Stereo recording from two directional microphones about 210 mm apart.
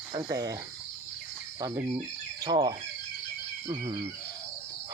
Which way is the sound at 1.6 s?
15° right (ahead or behind).